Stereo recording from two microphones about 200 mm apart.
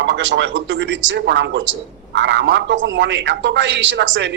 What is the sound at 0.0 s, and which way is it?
A man's voice, 70° right (ahead or behind).